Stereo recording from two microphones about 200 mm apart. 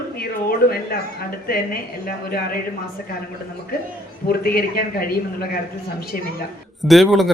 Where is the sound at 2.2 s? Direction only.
45° left (ahead or behind).